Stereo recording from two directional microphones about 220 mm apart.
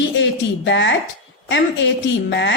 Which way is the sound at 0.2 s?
55° left (ahead or behind).